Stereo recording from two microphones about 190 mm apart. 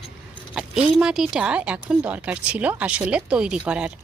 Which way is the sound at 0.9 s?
Centre (ahead or behind).